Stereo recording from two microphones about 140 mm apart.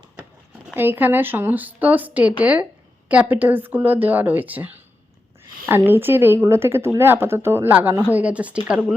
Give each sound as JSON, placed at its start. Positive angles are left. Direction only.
{"t": 0.7, "sound": "speech", "side_deg": -15}